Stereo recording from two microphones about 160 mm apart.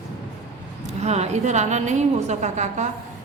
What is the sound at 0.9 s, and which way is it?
A woman's voice, 45° right (ahead or behind).